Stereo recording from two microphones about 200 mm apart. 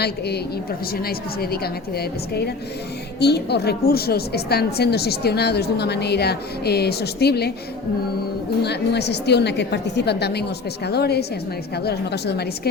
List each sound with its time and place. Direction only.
0.0 s a woman's voice: 55° left (ahead or behind)
8.6 s a woman's voice: 55° left (ahead or behind)